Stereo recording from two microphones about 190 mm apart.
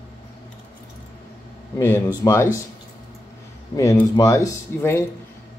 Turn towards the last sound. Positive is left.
turn(degrees=15)  # may be behind; listen again after turning